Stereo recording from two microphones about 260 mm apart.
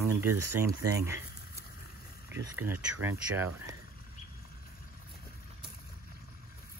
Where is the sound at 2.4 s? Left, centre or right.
Centre.